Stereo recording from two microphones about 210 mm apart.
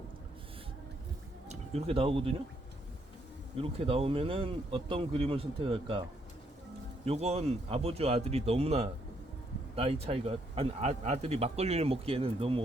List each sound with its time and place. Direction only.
1.5 s speech: 30° right (ahead or behind)
3.6 s a man's voice: 25° right (ahead or behind)